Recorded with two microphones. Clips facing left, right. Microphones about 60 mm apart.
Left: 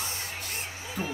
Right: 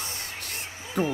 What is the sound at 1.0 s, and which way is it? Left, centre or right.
Speech, right.